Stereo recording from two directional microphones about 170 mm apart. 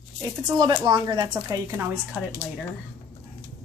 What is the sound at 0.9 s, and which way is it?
Speech, 20° right (ahead or behind).